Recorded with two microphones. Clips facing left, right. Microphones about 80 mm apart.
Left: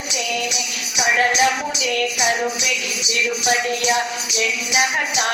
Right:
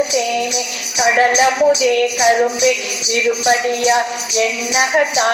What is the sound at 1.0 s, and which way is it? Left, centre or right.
Speech, right.